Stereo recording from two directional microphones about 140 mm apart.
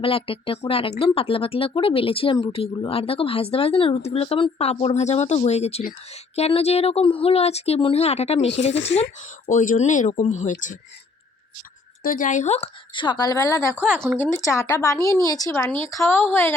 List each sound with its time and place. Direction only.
0.0 s speech: 40° left (ahead or behind)
9.5 s speech: 65° left (ahead or behind)
12.0 s speech: 70° left (ahead or behind); by 16.6 s 15° left (ahead or behind)